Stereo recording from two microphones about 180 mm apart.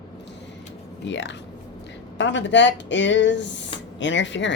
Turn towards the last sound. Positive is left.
turn(degrees=90)